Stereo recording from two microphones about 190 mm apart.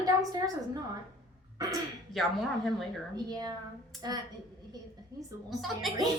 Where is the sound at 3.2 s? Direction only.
20° right (ahead or behind).